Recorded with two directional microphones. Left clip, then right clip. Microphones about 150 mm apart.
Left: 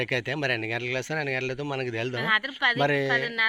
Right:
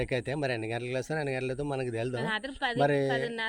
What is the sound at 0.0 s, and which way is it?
Speech, centre (ahead or behind).